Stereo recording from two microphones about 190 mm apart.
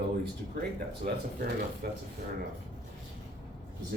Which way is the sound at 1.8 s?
55° right (ahead or behind).